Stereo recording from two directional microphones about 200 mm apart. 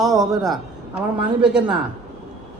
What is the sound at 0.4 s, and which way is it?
A woman's voice, 5° right (ahead or behind).